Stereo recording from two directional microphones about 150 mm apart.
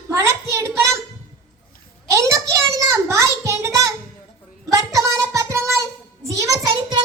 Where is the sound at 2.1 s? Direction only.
20° right (ahead or behind).